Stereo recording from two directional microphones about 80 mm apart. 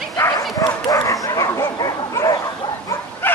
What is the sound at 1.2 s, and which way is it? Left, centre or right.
Bow-wow, left.